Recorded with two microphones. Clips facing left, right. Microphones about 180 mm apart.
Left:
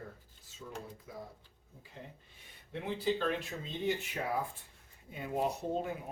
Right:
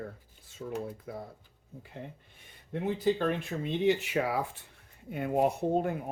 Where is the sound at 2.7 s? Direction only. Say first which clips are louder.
Right 5 dB; 50° right (ahead or behind); by 4.4 s 90° right.